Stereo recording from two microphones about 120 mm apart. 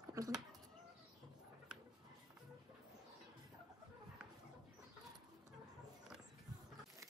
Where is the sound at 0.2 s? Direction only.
30° right (ahead or behind).